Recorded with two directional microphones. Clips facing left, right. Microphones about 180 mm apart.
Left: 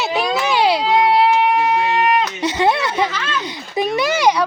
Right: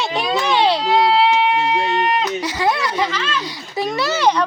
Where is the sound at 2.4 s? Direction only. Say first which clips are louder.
Left 3 dB; 25° left (ahead or behind).